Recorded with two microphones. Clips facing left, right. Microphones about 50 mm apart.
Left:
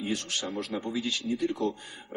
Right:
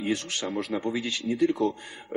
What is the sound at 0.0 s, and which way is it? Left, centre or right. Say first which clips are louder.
Speech: right 3 dB; right.